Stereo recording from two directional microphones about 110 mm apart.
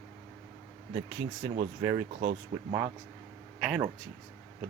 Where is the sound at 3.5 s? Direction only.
5° right (ahead or behind).